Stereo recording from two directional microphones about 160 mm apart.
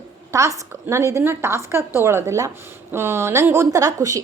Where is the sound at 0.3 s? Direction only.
20° right (ahead or behind).